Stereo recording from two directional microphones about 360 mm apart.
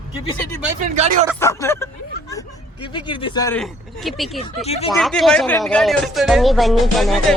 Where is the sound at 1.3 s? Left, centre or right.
Centre.